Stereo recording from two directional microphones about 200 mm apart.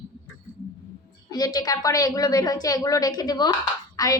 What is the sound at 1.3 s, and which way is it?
A woman's voice, 20° left (ahead or behind).